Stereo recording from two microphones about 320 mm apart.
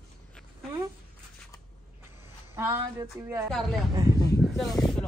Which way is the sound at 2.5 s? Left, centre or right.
Centre.